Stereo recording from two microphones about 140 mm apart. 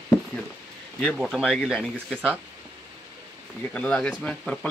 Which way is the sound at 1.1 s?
5° right (ahead or behind).